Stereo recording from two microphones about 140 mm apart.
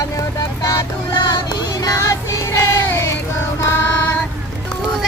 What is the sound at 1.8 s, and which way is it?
Music, 20° left (ahead or behind).